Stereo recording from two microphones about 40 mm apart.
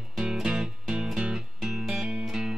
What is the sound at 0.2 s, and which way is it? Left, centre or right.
Music, centre.